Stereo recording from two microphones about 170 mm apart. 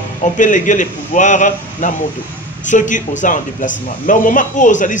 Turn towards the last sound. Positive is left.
turn(degrees=50)  # may be behind; listen again after turning